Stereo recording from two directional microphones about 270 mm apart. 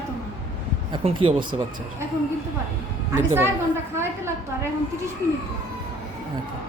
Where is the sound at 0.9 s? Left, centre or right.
Centre.